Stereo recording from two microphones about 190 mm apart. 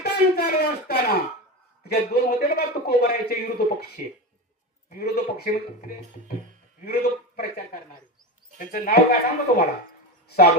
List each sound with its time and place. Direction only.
0.0 s a man's voice: 55° left (ahead or behind)